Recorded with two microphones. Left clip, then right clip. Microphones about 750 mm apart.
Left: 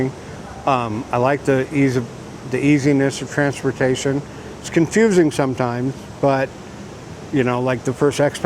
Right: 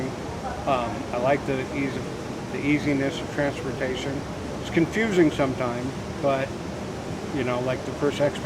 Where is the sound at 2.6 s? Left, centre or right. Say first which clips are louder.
Left 8 dB; left.